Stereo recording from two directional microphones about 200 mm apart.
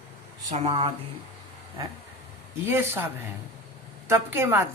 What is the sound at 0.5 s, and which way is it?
Speech, 35° right (ahead or behind).